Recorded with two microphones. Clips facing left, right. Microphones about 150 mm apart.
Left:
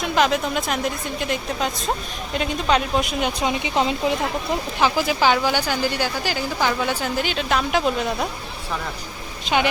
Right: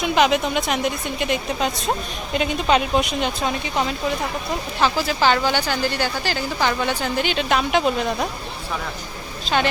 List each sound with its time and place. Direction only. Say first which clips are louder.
0.0 s a woman's voice: right 2 dB; centre (ahead or behind)
4.8 s a woman's voice: even; 15° left (ahead or behind)
9.4 s speech: even; 15° left (ahead or behind)